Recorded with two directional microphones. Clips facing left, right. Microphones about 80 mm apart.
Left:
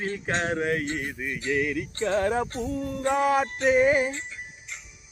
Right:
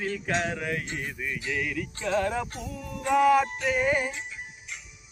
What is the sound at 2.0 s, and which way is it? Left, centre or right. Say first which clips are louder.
Music: left 3 dB; left.